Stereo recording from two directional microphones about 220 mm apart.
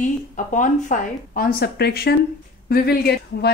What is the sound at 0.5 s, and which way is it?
A woman's voice, 35° left (ahead or behind).